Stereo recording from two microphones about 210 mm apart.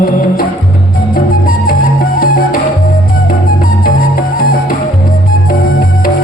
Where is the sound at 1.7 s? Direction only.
45° left (ahead or behind).